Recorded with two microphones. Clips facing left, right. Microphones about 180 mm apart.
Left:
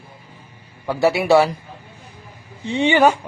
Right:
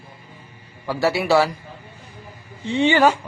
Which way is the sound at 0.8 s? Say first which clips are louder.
Left 3 dB; 20° left (ahead or behind).